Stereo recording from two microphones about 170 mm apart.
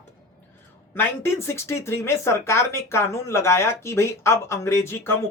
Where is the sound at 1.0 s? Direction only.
15° left (ahead or behind).